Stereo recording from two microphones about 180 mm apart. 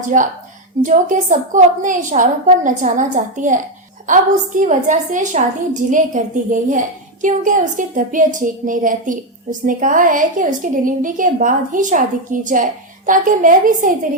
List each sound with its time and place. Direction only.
0.1 s a woman's voice: 45° right (ahead or behind)